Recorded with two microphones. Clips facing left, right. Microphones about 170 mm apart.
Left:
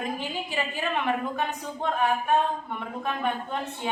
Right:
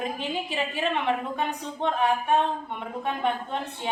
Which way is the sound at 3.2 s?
25° right (ahead or behind).